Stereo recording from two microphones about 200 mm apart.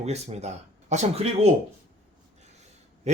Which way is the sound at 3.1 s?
35° right (ahead or behind).